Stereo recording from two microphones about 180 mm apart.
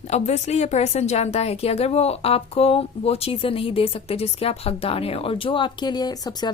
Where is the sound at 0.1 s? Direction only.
40° left (ahead or behind).